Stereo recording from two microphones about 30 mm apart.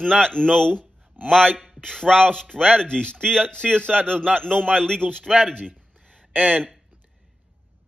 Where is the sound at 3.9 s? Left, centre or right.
Right.